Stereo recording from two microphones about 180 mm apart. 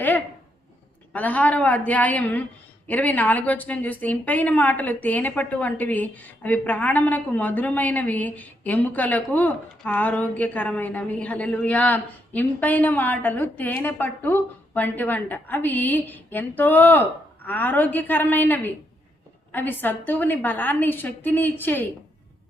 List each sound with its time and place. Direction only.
1.1 s a woman's voice: 10° left (ahead or behind)